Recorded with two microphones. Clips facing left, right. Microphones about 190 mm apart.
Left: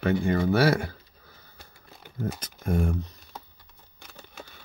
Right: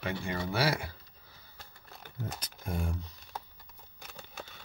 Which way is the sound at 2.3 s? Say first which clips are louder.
Left 11 dB; 55° left (ahead or behind).